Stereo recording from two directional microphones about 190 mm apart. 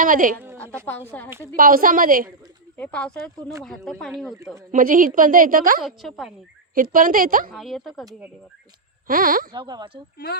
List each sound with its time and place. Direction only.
0.0 s a woman's voice: 45° right (ahead or behind)
0.5 s a sound: 5° left (ahead or behind)
0.9 s speech: 10° left (ahead or behind)
1.5 s a woman's voice: 50° right (ahead or behind)
2.7 s a woman's voice: 5° left (ahead or behind)
4.7 s a woman's voice: 45° right (ahead or behind)
5.8 s a woman's voice: centre (ahead or behind)
6.7 s a woman's voice: 45° right (ahead or behind)
7.5 s a woman's voice: centre (ahead or behind)
9.0 s a woman's voice: 45° right (ahead or behind)
9.5 s speech: 25° right (ahead or behind)